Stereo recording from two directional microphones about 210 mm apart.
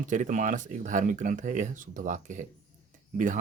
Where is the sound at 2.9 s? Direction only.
40° right (ahead or behind).